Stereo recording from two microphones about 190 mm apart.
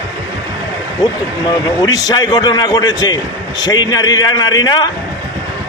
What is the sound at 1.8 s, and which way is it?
A man's voice, 20° left (ahead or behind).